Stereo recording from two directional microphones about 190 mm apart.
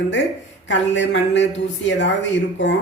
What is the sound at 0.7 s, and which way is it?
Speech, 70° left (ahead or behind).